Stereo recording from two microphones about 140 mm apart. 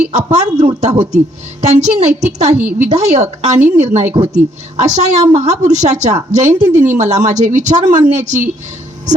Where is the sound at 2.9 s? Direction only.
50° right (ahead or behind).